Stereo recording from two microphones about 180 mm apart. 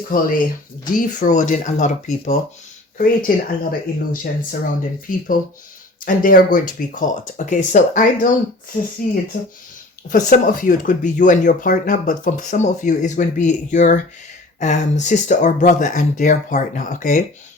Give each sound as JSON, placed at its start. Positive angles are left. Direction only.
{"t": 0.1, "sound": "speech", "side_deg": 50}